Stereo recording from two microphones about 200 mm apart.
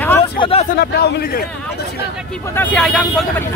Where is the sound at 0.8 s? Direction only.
55° left (ahead or behind).